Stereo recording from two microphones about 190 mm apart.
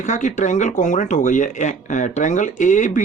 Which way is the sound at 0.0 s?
40° left (ahead or behind).